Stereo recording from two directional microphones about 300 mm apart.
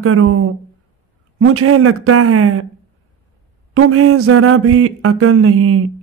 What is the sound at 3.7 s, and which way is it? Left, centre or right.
Mantra, right.